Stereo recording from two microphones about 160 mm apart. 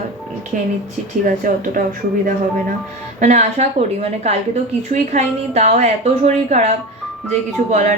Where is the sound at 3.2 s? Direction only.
45° right (ahead or behind).